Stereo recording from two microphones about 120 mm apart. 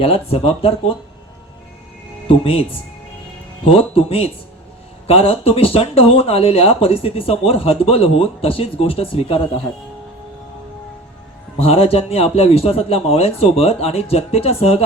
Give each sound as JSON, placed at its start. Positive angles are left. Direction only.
{"t": 0.0, "sound": "speech", "side_deg": 55}
{"t": 2.2, "sound": "speech", "side_deg": 50}
{"t": 11.6, "sound": "a man's voice", "side_deg": 55}